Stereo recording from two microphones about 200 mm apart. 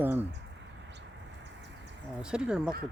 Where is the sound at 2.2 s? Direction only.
5° right (ahead or behind).